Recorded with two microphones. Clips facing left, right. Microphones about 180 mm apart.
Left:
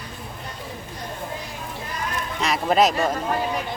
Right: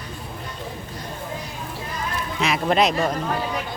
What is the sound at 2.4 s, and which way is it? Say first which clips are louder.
Speech: left 1 dB; centre (ahead or behind).